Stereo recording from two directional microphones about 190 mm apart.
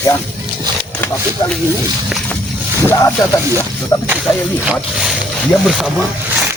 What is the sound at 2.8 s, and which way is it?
Speech, 15° left (ahead or behind).